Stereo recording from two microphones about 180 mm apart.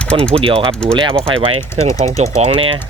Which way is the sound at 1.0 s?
30° right (ahead or behind).